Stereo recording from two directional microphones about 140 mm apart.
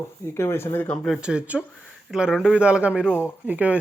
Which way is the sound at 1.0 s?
Centre (ahead or behind).